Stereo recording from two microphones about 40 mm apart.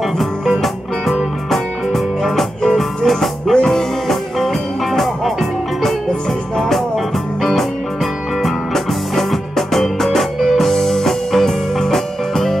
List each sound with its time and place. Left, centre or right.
0.2 s music: centre
8.4 s music: centre